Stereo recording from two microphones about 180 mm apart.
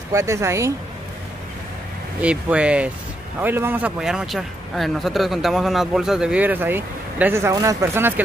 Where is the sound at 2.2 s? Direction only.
5° right (ahead or behind).